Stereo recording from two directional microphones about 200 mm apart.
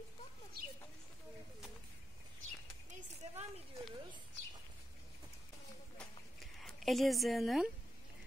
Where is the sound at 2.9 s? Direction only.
35° right (ahead or behind).